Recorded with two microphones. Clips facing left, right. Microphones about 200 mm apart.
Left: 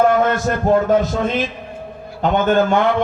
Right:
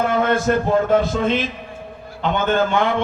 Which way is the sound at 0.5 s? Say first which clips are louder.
Right 3 dB; 40° left (ahead or behind).